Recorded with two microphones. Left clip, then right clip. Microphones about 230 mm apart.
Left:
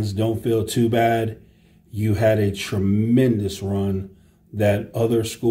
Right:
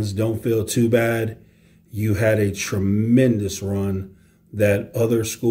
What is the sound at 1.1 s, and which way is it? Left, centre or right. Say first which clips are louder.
Speech: left 2 dB; left.